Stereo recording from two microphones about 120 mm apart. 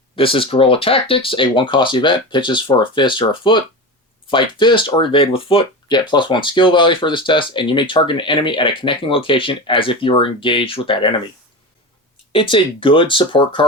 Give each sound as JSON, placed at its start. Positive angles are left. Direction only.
{"t": 0.2, "sound": "speech", "side_deg": 50}
{"t": 12.3, "sound": "speech", "side_deg": 45}